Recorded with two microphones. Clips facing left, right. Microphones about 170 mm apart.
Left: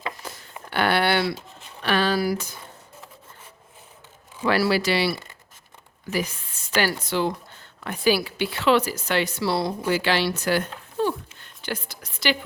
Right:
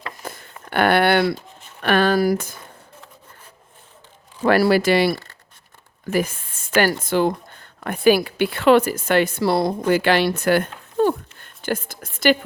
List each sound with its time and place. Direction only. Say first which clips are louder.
0.2 s a sound: right 4 dB; 55° right (ahead or behind)
0.7 s speech: right 5 dB; 55° right (ahead or behind)
4.4 s a woman's voice: right 6 dB; 50° right (ahead or behind)